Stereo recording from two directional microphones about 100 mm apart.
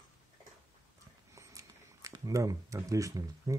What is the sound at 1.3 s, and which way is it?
Speech, 35° right (ahead or behind).